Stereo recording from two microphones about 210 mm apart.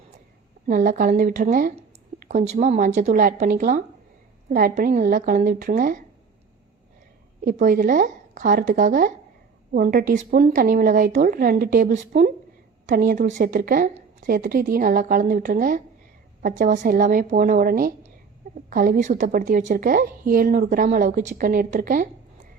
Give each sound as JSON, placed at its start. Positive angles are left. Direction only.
{"t": 0.7, "sound": "a woman's voice", "side_deg": -40}
{"t": 7.4, "sound": "a woman's voice", "side_deg": -40}